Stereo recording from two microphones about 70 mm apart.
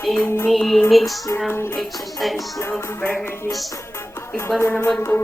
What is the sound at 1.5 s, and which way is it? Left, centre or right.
Music, left.